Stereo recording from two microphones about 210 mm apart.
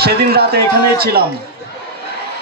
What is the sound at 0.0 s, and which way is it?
A man's voice, 50° right (ahead or behind).